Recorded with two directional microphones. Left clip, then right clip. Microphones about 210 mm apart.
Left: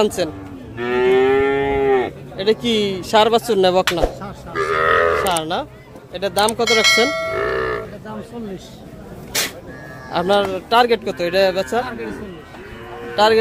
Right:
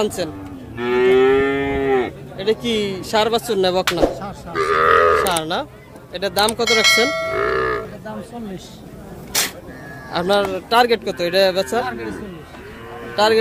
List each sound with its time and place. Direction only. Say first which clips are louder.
0.0 s speech: left 3 dB; 25° left (ahead or behind)
0.7 s moo: right 1 dB; 45° right (ahead or behind)
2.3 s speech: left 2 dB; 20° left (ahead or behind)
4.2 s grunt: right 1 dB; 35° right (ahead or behind)
5.2 s a man's voice: even; centre (ahead or behind)
7.4 s music: right 1 dB; 40° right (ahead or behind)
10.1 s a man's voice: left 1 dB; 5° left (ahead or behind)
13.1 s speech: left 1 dB; 10° left (ahead or behind)